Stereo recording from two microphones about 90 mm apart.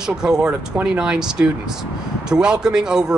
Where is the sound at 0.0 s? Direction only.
5° right (ahead or behind).